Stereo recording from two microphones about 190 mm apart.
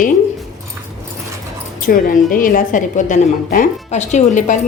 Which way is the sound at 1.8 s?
45° left (ahead or behind).